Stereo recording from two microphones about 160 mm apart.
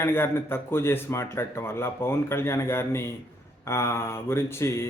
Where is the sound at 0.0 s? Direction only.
15° left (ahead or behind).